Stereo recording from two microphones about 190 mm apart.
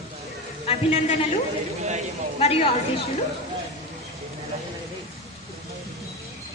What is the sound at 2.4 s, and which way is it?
Speech, 30° left (ahead or behind).